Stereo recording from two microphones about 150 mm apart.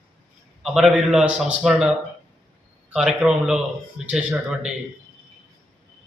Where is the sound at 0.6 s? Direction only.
5° right (ahead or behind).